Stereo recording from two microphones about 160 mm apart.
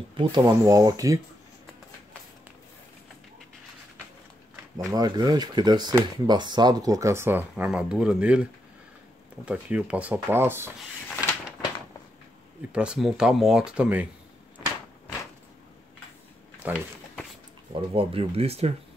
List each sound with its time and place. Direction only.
0.2 s speech: 30° right (ahead or behind)
4.7 s speech: 25° right (ahead or behind); by 8.5 s 5° right (ahead or behind)
9.5 s speech: 10° right (ahead or behind)
12.7 s speech: 5° right (ahead or behind)
16.6 s speech: 10° right (ahead or behind)
17.7 s speech: 35° right (ahead or behind)